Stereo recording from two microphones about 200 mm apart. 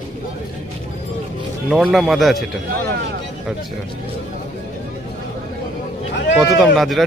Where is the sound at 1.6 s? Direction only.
Centre (ahead or behind).